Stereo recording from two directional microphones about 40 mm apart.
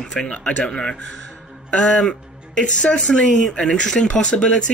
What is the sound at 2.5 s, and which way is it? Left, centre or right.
Speech, left.